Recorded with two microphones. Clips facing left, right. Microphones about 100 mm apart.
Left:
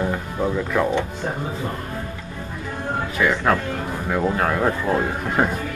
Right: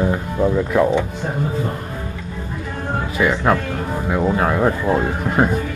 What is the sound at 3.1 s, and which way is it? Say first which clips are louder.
Speech: right 3 dB; 10° right (ahead or behind).